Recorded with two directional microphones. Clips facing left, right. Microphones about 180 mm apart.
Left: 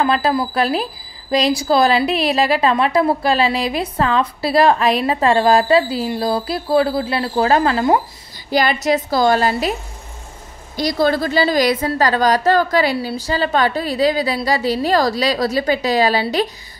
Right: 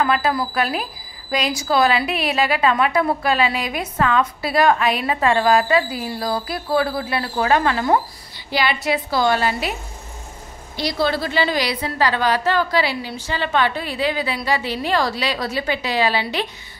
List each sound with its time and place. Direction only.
0.0 s a woman's voice: 30° left (ahead or behind)
8.5 s a woman's voice: 45° left (ahead or behind)
10.8 s a woman's voice: 45° left (ahead or behind)